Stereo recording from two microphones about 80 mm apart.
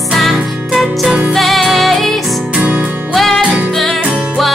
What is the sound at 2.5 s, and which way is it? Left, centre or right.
Music, centre.